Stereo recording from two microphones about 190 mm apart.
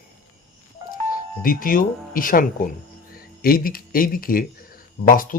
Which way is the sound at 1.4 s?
50° left (ahead or behind).